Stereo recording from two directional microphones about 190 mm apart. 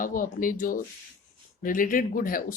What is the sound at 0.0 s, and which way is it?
Speech, 45° left (ahead or behind).